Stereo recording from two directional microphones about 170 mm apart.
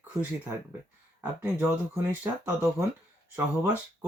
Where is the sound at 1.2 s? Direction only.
10° right (ahead or behind).